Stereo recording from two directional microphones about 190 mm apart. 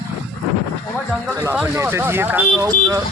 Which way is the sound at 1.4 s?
10° right (ahead or behind).